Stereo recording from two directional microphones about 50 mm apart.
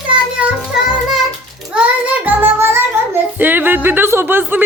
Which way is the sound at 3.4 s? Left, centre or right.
Right.